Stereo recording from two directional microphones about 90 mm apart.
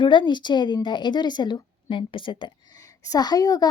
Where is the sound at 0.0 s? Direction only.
60° left (ahead or behind).